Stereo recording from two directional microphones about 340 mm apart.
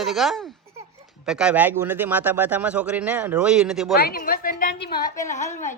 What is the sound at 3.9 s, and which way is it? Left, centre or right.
A woman's voice, left.